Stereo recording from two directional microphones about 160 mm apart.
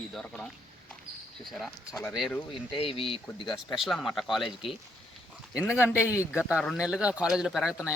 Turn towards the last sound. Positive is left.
turn(degrees=-5)  # may be behind; listen again after turning